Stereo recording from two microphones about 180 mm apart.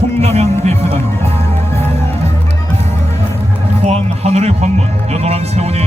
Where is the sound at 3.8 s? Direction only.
35° right (ahead or behind).